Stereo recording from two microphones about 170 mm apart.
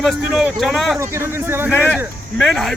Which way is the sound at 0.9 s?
15° right (ahead or behind).